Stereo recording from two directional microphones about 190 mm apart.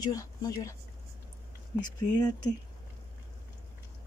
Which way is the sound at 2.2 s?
20° left (ahead or behind).